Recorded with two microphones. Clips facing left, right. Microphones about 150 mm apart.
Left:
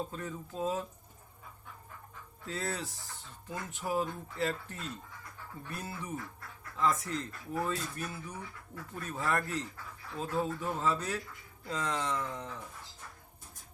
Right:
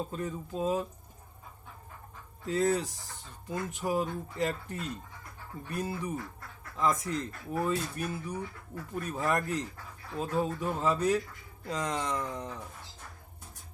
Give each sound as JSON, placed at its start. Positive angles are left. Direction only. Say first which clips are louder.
{"t": 0.1, "sound": "speech", "louder": "right 5 dB", "side_deg": -15}
{"t": 2.5, "sound": "speech", "louder": "right 9 dB", "side_deg": -15}